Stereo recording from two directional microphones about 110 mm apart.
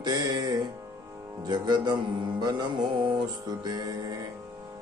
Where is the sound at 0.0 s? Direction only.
35° right (ahead or behind).